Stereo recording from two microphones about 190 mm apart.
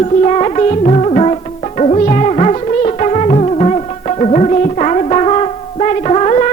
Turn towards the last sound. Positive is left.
turn(degrees=35)  # may be behind; listen again after turning